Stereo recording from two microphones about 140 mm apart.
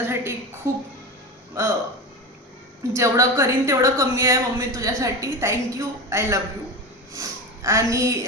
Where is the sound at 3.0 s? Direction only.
20° right (ahead or behind).